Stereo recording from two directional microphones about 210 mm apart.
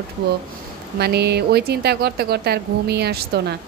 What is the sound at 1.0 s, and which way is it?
Speech, 50° right (ahead or behind).